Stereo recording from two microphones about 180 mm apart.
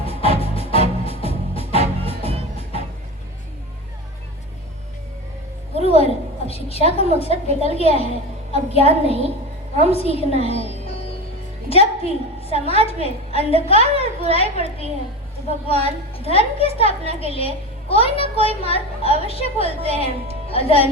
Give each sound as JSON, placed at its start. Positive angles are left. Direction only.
{"t": 0.2, "sound": "music", "side_deg": 35}
{"t": 2.0, "sound": "music", "side_deg": -35}
{"t": 5.7, "sound": "a sound", "side_deg": 35}
{"t": 6.5, "sound": "a woman's voice", "side_deg": 35}
{"t": 11.7, "sound": "a sound", "side_deg": 35}
{"t": 12.8, "sound": "a woman's voice", "side_deg": 35}